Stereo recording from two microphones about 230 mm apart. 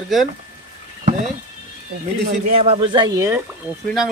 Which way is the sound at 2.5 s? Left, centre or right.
Right.